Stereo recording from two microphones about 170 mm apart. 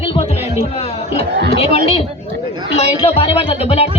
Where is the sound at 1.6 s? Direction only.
40° left (ahead or behind).